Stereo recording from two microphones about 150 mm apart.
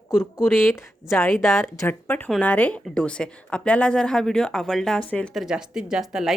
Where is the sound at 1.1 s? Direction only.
15° left (ahead or behind).